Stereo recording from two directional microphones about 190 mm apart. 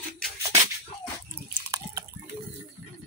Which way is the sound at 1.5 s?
15° right (ahead or behind).